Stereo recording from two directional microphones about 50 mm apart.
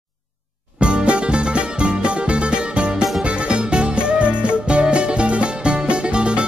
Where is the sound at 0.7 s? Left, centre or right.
Right.